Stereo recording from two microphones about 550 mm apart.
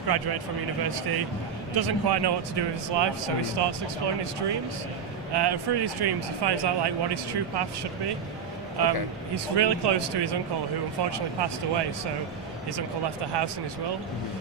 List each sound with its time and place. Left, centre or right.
0.1 s speech: right
5.3 s speech: right